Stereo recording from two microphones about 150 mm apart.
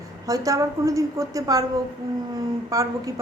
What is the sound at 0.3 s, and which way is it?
A woman's voice, 25° right (ahead or behind).